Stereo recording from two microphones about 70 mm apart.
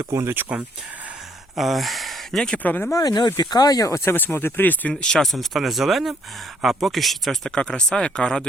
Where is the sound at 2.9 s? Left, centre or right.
Left.